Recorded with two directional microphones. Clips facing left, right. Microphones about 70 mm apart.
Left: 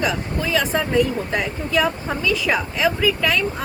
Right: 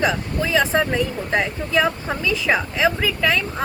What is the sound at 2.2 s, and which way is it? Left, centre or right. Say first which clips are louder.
A woman's voice: even; right.